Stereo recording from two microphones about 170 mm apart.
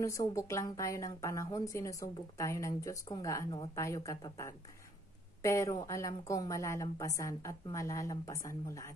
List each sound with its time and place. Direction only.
0.0 s a woman's voice: 20° left (ahead or behind)